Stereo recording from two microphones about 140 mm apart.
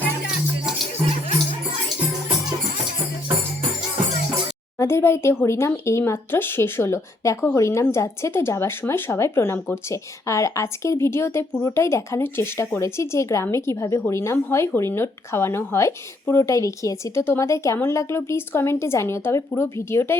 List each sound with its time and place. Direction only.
4.8 s speech: 20° left (ahead or behind)